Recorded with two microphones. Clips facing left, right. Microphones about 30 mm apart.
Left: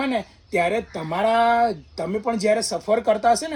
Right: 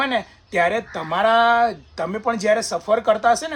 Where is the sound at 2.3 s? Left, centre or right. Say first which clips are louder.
Right 2 dB; right.